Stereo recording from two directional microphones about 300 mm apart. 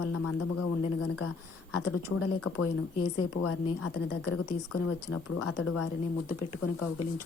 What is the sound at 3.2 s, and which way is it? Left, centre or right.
A woman's voice, left.